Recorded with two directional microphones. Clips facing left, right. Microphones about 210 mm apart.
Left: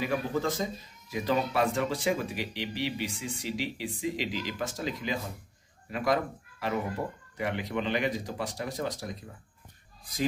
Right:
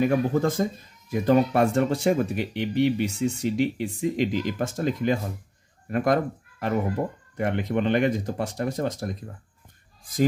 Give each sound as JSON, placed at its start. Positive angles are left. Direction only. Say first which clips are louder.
{"t": 0.0, "sound": "speech", "louder": "right 8 dB", "side_deg": -50}